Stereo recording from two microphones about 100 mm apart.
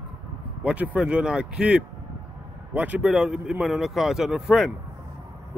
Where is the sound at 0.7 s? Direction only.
10° right (ahead or behind).